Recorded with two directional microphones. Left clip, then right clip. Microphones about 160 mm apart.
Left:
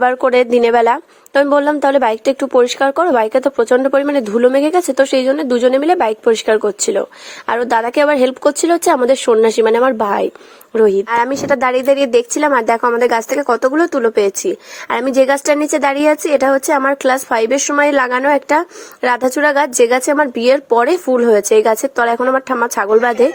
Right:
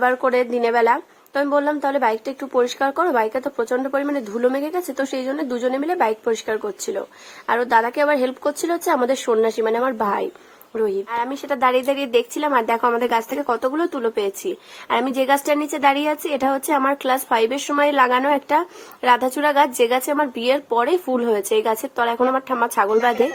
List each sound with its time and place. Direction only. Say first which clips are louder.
0.0 s speech: left 6 dB; 40° left (ahead or behind)